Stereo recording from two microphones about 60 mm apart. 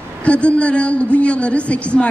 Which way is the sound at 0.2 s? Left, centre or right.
Left.